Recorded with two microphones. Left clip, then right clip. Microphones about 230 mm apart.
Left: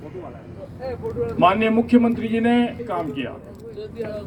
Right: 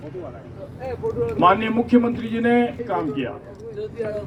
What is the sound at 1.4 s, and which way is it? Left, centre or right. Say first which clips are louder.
A man's voice: even; left.